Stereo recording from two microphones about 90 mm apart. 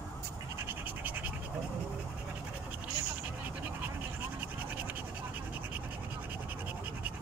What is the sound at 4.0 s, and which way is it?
Scratch, 20° right (ahead or behind).